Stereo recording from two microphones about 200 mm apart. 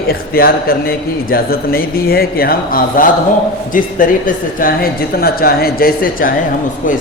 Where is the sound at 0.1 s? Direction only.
50° left (ahead or behind).